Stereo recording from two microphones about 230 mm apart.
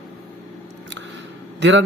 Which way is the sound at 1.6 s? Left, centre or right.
Right.